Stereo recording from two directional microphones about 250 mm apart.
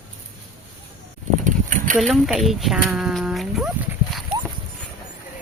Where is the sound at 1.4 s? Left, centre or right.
Right.